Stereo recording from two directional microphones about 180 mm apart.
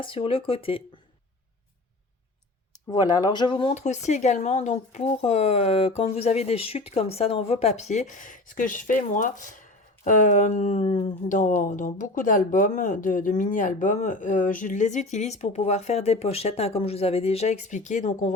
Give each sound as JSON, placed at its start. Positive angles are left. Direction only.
{"t": 0.0, "sound": "speech", "side_deg": 30}
{"t": 2.9, "sound": "speech", "side_deg": 25}